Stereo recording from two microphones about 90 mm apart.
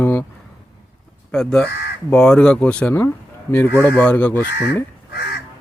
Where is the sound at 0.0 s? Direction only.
20° left (ahead or behind).